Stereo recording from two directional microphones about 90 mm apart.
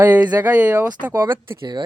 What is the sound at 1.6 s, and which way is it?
Speech, 55° right (ahead or behind).